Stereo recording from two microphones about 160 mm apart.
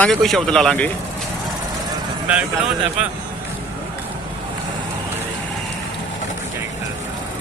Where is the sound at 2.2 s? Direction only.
10° right (ahead or behind).